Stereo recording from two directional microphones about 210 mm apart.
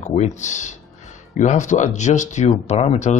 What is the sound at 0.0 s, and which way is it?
A man's voice, 35° left (ahead or behind).